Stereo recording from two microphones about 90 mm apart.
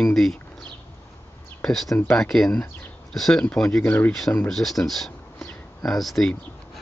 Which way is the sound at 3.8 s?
20° left (ahead or behind).